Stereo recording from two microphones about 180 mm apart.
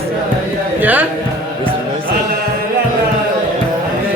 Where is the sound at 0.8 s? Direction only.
10° right (ahead or behind).